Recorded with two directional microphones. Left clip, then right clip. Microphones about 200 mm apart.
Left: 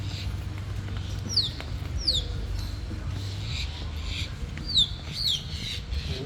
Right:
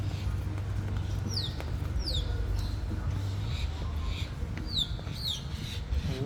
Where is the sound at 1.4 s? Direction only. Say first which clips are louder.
Left 10 dB; 60° right (ahead or behind).